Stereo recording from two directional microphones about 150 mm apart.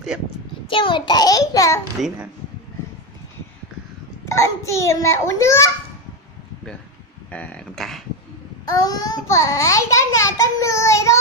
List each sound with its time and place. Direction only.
0.7 s a child's voice: 35° left (ahead or behind)
2.0 s speech: centre (ahead or behind)
4.3 s a child's voice: 20° left (ahead or behind)
7.2 s speech: 10° left (ahead or behind)
8.6 s a child's voice: 25° left (ahead or behind)